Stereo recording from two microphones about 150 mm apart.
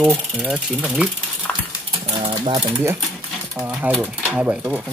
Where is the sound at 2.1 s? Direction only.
30° right (ahead or behind).